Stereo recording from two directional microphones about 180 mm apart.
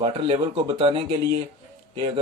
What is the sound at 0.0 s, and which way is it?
Speech, 25° right (ahead or behind).